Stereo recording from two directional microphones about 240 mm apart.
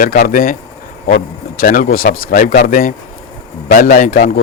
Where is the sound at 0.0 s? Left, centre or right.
Left.